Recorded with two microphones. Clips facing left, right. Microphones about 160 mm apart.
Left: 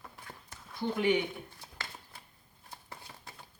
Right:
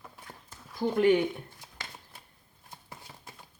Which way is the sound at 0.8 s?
40° right (ahead or behind).